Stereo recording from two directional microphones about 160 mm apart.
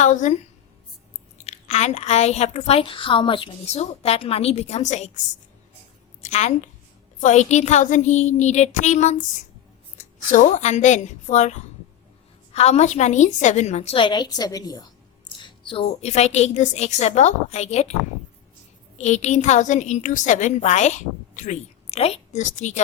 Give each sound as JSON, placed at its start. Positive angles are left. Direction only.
{"t": 0.0, "sound": "speech", "side_deg": 50}
{"t": 1.4, "sound": "speech", "side_deg": 45}
{"t": 7.2, "sound": "a woman's voice", "side_deg": 50}
{"t": 18.9, "sound": "speech", "side_deg": 45}